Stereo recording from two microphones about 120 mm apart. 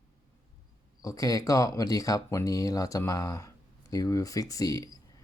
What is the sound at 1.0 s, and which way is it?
Speech, 30° left (ahead or behind).